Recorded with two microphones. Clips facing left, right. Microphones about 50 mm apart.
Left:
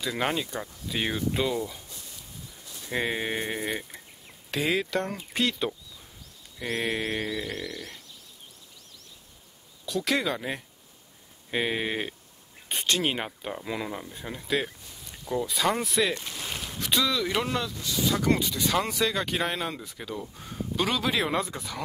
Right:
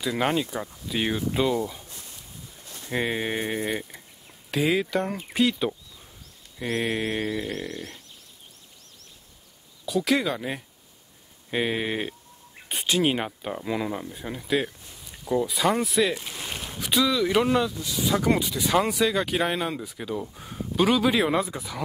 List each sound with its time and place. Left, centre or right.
0.0 s speech: centre
2.9 s speech: centre
7.0 s mantra: centre
7.2 s a sound: right
9.8 s speech: centre